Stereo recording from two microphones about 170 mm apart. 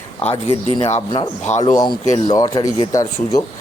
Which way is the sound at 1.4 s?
45° left (ahead or behind).